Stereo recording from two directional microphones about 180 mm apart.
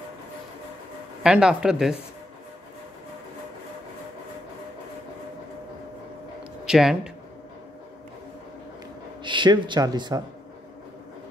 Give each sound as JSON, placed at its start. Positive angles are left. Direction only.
{"t": 1.2, "sound": "speech", "side_deg": -5}
{"t": 6.6, "sound": "speech", "side_deg": -5}
{"t": 9.2, "sound": "a man's voice", "side_deg": -25}